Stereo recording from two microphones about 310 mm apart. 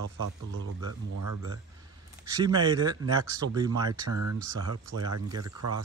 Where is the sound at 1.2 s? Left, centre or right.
Right.